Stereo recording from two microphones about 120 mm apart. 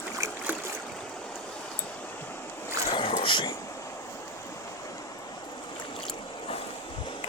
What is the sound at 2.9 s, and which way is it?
Boat, 45° left (ahead or behind).